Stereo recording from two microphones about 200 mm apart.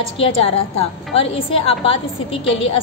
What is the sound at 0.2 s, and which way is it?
A woman's voice, 30° left (ahead or behind).